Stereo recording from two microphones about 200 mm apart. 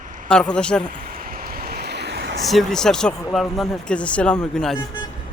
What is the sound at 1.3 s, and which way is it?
Waves, 45° right (ahead or behind).